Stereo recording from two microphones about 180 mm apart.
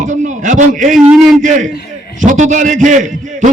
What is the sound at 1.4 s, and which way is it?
A man's voice, 45° right (ahead or behind).